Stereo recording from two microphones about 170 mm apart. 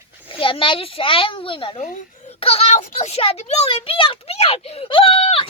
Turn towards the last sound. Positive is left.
turn(degrees=35)  # may be behind; listen again after turning